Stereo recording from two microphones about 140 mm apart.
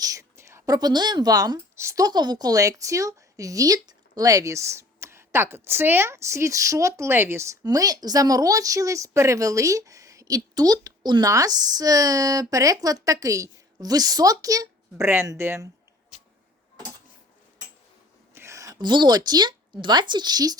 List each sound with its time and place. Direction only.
0.0 s speech: 25° right (ahead or behind)
18.3 s a woman's voice: 20° right (ahead or behind)